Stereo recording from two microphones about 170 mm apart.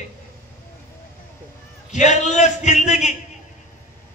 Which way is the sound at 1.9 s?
45° left (ahead or behind).